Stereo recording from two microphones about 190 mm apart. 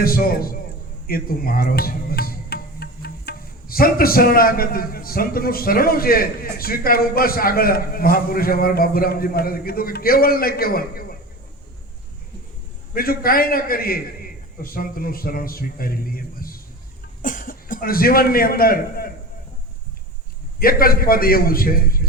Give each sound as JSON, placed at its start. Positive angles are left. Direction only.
{"t": 0.0, "sound": "speech", "side_deg": 50}
{"t": 12.9, "sound": "a man's voice", "side_deg": 50}
{"t": 20.6, "sound": "speech", "side_deg": 50}